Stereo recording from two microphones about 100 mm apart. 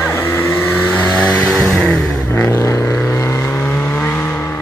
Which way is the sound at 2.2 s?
20° left (ahead or behind).